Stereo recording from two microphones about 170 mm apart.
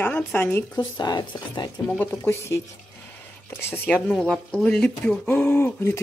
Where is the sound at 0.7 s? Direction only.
25° left (ahead or behind).